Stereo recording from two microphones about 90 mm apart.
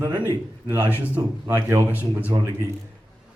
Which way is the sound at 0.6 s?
25° right (ahead or behind).